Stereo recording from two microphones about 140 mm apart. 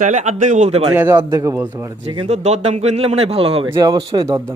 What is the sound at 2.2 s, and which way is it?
Speech, 55° right (ahead or behind).